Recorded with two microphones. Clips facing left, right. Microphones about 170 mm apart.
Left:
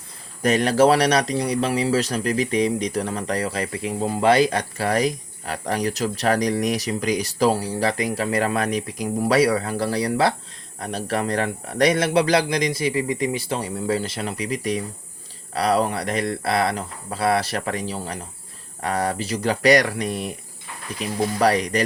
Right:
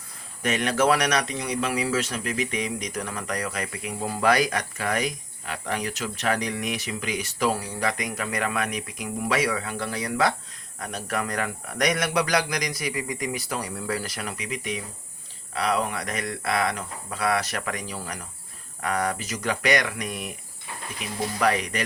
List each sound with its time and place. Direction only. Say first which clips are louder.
0.4 s speech: left 6 dB; 35° left (ahead or behind)
21.3 s speech: left 4 dB; 35° left (ahead or behind)